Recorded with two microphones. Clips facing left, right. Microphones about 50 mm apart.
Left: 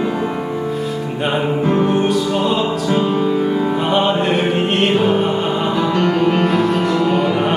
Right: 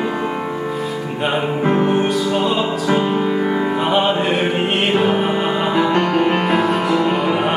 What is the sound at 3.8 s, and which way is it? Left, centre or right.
Music, centre.